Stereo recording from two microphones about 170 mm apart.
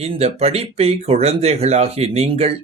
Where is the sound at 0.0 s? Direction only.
40° right (ahead or behind).